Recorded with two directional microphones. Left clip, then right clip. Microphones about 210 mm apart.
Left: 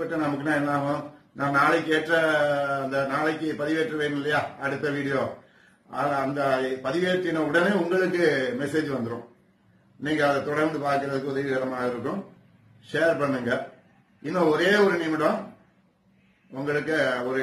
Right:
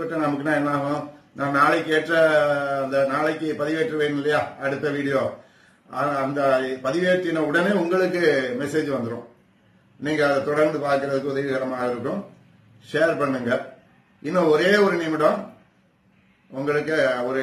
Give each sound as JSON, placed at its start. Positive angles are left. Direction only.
{"t": 0.0, "sound": "a man's voice", "side_deg": 0}
{"t": 16.5, "sound": "a man's voice", "side_deg": 0}